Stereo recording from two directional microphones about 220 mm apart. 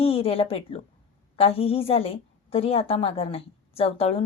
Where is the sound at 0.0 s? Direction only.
25° left (ahead or behind).